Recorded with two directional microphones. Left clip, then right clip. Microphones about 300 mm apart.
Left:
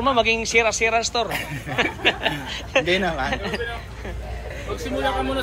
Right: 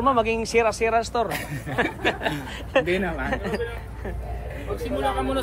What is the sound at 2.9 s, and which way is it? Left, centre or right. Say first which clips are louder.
Speech: left 4 dB; centre.